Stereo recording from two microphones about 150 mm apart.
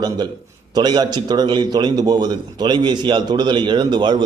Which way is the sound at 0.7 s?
30° right (ahead or behind).